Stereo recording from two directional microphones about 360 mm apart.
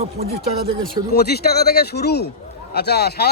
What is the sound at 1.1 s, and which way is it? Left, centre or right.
A man's voice, left.